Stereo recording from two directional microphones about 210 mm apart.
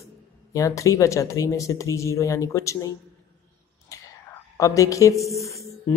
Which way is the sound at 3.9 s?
15° left (ahead or behind).